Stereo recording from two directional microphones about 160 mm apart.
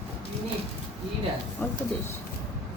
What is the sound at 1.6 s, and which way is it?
Speech, 10° left (ahead or behind).